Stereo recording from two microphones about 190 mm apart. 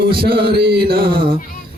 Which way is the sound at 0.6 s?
55° right (ahead or behind).